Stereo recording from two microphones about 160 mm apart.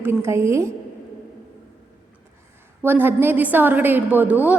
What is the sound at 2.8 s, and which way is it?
A woman's voice, 15° right (ahead or behind).